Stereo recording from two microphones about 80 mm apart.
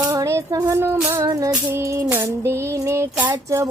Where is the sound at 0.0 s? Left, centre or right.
Right.